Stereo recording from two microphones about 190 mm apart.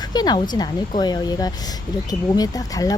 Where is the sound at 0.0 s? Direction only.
20° left (ahead or behind).